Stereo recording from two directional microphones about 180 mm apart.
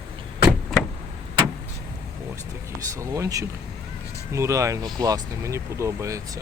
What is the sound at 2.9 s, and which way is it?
Speech, 20° right (ahead or behind).